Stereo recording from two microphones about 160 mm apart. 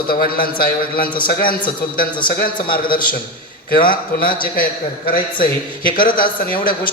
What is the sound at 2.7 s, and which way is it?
Speech, 65° left (ahead or behind).